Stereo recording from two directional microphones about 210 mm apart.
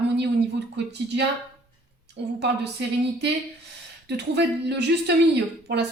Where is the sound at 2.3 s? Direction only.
55° right (ahead or behind).